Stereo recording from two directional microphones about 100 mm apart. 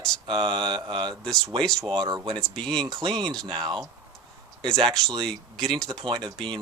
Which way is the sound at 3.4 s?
45° right (ahead or behind).